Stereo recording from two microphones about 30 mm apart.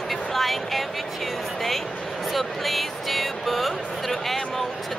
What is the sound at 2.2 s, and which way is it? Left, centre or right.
Music, centre.